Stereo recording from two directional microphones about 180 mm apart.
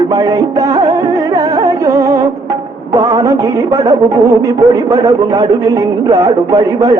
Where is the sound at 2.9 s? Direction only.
20° right (ahead or behind).